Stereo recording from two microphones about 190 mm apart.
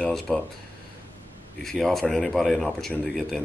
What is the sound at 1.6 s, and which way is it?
Speech, centre (ahead or behind).